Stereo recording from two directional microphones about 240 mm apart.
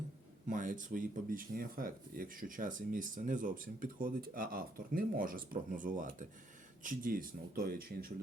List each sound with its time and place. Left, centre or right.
0.4 s speech: right